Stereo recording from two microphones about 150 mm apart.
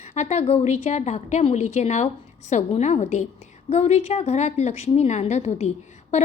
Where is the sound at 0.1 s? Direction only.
50° left (ahead or behind).